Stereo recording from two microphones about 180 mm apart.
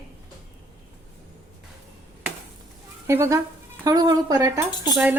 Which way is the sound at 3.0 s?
15° right (ahead or behind).